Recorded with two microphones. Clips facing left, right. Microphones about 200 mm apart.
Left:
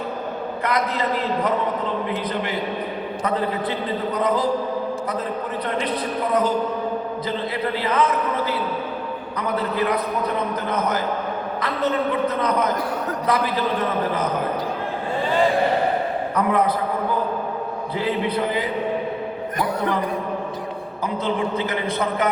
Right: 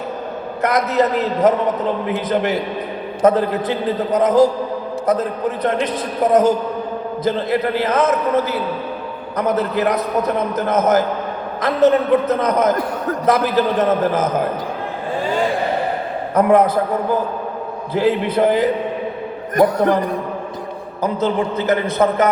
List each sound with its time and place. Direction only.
0.6 s a man's voice: 45° right (ahead or behind)
3.2 s a man's voice: 45° right (ahead or behind)
6.2 s a man's voice: 45° right (ahead or behind)
16.3 s a man's voice: 45° right (ahead or behind)
17.9 s a man's voice: 45° right (ahead or behind)